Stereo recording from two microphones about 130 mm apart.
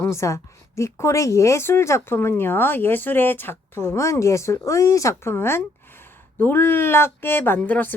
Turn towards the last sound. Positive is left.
turn(degrees=10)  # may be behind; listen again after turning